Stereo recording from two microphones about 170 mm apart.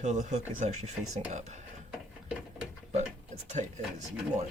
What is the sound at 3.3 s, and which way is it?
Speech, 40° right (ahead or behind).